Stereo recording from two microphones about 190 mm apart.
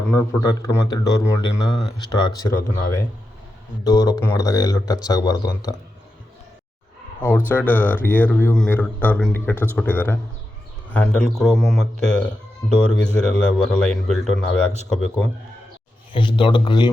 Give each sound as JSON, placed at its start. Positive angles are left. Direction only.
{"t": 0.1, "sound": "a man's voice", "side_deg": 15}
{"t": 7.2, "sound": "a man's voice", "side_deg": 10}
{"t": 16.1, "sound": "speech", "side_deg": 25}